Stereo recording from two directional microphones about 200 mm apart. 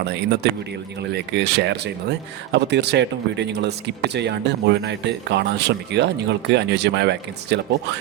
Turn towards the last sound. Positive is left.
turn(degrees=-60)  # may be behind; listen again after turning